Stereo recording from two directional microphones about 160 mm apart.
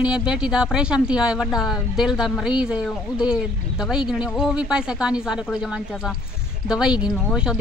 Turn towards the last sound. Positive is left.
turn(degrees=-5)  # may be behind; listen again after turning